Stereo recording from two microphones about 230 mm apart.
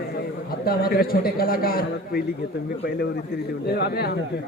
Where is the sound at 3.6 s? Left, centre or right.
Left.